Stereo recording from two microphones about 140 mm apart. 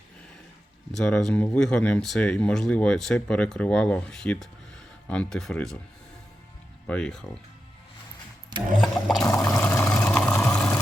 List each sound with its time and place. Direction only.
0.9 s speech: 5° left (ahead or behind)
6.8 s speech: 5° left (ahead or behind)
8.8 s speech: centre (ahead or behind)
9.4 s a sound: 15° left (ahead or behind)
9.9 s vehicle: 5° left (ahead or behind)